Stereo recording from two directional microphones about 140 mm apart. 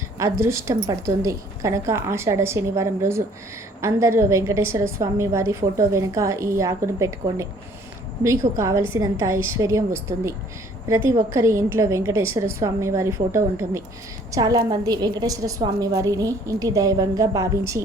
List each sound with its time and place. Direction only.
0.2 s a woman's voice: 20° right (ahead or behind)